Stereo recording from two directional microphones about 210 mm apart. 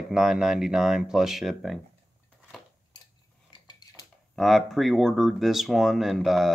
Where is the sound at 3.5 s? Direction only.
20° left (ahead or behind).